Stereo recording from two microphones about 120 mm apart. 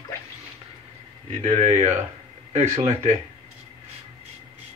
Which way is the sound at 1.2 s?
70° right (ahead or behind).